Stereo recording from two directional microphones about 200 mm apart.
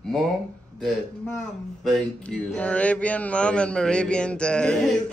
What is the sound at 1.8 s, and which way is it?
Speech, centre (ahead or behind).